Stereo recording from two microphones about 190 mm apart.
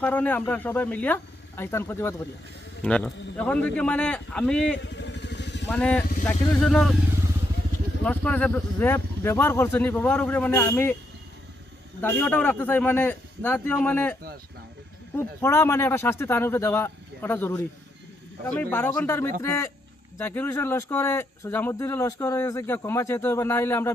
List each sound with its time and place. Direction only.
0.0 s a man's voice: 10° left (ahead or behind)
4.8 s motorcycle: 70° left (ahead or behind)
5.6 s a man's voice: 5° left (ahead or behind)
8.0 s speech: 5° left (ahead or behind)
12.0 s speech: 10° left (ahead or behind)